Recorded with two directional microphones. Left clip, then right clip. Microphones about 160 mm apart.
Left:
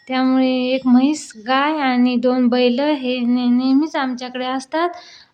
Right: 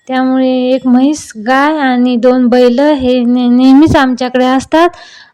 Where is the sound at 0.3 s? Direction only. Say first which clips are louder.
Right 7 dB; 40° right (ahead or behind).